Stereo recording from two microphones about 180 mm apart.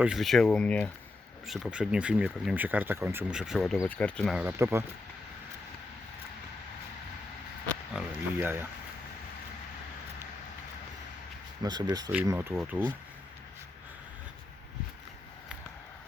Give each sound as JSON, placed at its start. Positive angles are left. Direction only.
{"t": 0.0, "sound": "speech", "side_deg": 0}
{"t": 4.4, "sound": "speech", "side_deg": -15}
{"t": 7.9, "sound": "speech", "side_deg": -10}
{"t": 11.6, "sound": "speech", "side_deg": -20}